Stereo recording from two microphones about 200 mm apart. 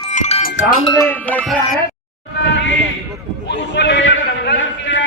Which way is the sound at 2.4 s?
60° left (ahead or behind).